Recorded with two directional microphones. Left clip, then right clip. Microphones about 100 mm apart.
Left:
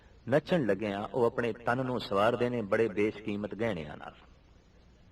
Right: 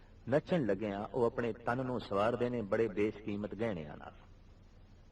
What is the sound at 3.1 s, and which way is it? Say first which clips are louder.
Speech: left 5 dB; 25° left (ahead or behind).